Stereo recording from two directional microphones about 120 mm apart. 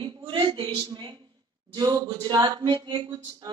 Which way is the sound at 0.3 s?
40° right (ahead or behind).